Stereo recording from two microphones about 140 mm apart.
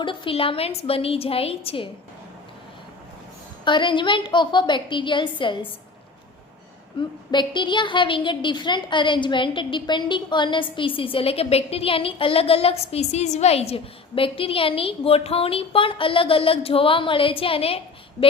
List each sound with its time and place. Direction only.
0.0 s a woman's voice: 40° left (ahead or behind)
3.6 s a woman's voice: 35° left (ahead or behind)
7.3 s a woman's voice: 35° left (ahead or behind)